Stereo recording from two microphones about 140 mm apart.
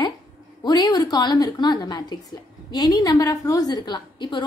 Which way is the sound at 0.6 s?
30° left (ahead or behind).